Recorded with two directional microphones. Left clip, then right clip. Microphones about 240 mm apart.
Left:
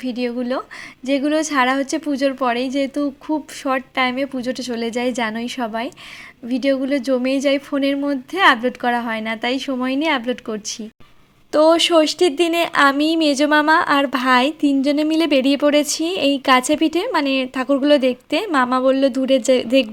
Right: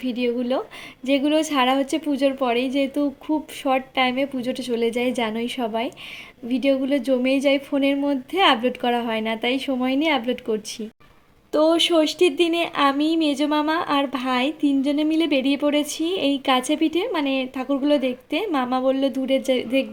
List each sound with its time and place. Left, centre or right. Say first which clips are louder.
0.0 s a woman's voice: even; centre